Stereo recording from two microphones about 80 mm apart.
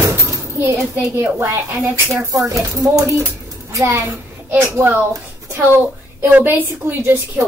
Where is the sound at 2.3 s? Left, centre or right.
Right.